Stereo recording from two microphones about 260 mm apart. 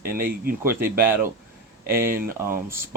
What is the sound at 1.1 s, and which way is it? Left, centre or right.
Speech, centre.